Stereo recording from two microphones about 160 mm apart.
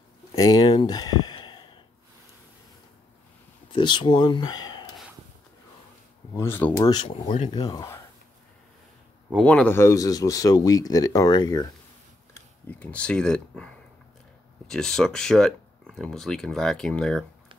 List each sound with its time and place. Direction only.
0.4 s a sound: 25° left (ahead or behind)
3.7 s speech: 30° left (ahead or behind)
6.3 s speech: 15° left (ahead or behind); by 7.5 s 35° left (ahead or behind)
7.5 s speech: 25° left (ahead or behind)
9.4 s speech: 5° left (ahead or behind); by 11.7 s 25° left (ahead or behind)
12.4 s speech: 10° left (ahead or behind)
14.7 s speech: 5° left (ahead or behind)